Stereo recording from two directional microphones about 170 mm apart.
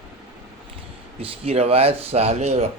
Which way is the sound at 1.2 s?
35° right (ahead or behind).